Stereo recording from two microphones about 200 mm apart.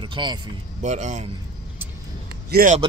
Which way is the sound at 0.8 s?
35° right (ahead or behind).